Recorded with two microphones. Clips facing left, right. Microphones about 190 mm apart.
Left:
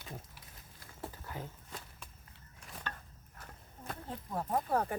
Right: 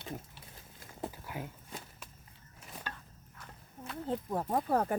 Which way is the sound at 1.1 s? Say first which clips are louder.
Right 2 dB; 15° right (ahead or behind).